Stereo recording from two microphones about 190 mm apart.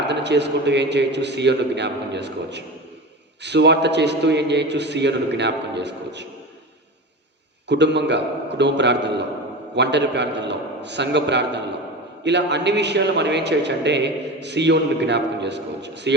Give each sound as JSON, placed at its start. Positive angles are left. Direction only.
{"t": 0.0, "sound": "a man's voice", "side_deg": -65}
{"t": 7.7, "sound": "a man's voice", "side_deg": -65}